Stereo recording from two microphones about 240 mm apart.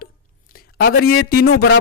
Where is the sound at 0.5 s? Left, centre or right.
Left.